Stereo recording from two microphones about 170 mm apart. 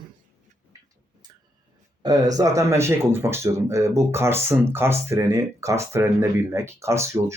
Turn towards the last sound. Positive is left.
turn(degrees=-15)  # may be behind; listen again after turning